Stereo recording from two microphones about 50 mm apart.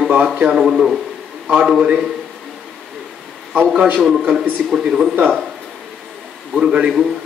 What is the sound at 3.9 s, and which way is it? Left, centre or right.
Speech, centre.